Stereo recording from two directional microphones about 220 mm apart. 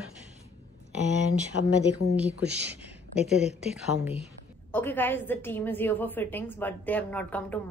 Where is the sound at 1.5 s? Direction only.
85° left.